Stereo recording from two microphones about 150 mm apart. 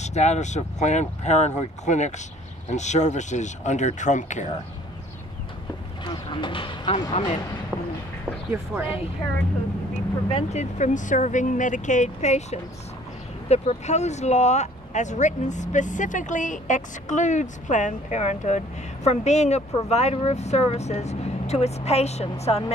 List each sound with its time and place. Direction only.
0.0 s speech: 50° left (ahead or behind)
6.0 s speech: 30° left (ahead or behind)
7.7 s a sound: 10° right (ahead or behind)
8.5 s speech: 10° right (ahead or behind)
10.3 s speech: 50° left (ahead or behind)